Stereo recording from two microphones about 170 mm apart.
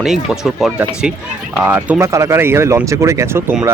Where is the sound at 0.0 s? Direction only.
Centre (ahead or behind).